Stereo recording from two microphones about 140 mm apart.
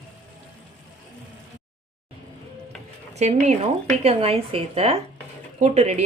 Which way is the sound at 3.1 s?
55° right (ahead or behind).